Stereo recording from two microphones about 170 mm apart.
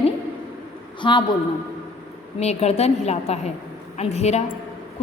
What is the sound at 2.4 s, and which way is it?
A woman's voice, 40° left (ahead or behind).